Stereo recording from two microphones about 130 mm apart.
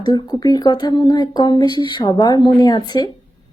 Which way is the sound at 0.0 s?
30° left (ahead or behind).